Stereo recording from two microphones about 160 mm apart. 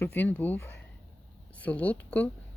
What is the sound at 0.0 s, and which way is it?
Speech, 10° left (ahead or behind).